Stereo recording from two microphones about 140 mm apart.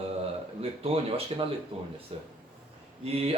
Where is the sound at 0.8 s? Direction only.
45° right (ahead or behind).